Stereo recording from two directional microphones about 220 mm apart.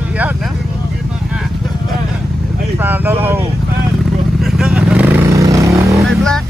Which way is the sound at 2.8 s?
10° right (ahead or behind).